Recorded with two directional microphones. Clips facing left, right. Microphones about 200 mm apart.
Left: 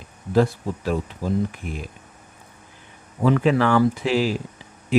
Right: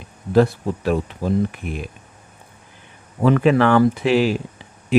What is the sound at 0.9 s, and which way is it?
Speech, 65° right (ahead or behind).